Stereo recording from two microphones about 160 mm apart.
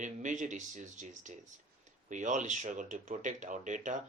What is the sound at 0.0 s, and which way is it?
Speech, 50° right (ahead or behind).